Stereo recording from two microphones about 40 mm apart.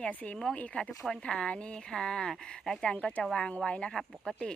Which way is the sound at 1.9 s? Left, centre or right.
Centre.